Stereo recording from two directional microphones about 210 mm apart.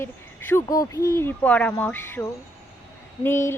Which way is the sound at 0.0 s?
10° left (ahead or behind).